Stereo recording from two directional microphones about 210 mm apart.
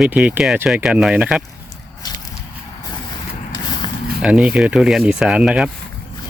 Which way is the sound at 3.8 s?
20° left (ahead or behind).